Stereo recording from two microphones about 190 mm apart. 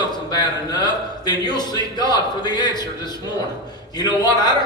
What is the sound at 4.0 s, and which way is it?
Speech, 20° left (ahead or behind).